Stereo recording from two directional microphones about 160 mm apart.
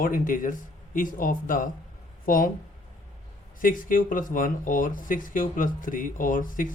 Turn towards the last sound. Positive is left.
turn(degrees=55)  # may be behind; listen again after turning